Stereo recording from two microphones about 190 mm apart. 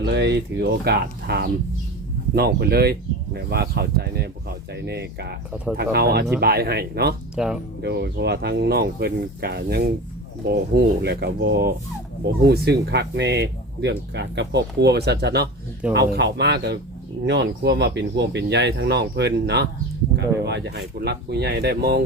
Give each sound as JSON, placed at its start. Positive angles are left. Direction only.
{"t": 0.0, "sound": "speech", "side_deg": -65}
{"t": 7.3, "sound": "speech", "side_deg": -5}
{"t": 7.8, "sound": "speech", "side_deg": -60}